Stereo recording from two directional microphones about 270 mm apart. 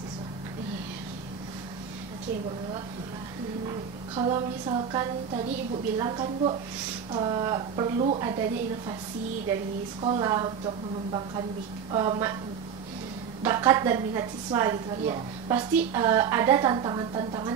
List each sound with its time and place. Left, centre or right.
4.1 s a sound: centre
5.9 s a woman's voice: centre
10.0 s a woman's voice: centre
11.1 s a sound: centre
11.9 s a woman's voice: centre
13.4 s a woman's voice: centre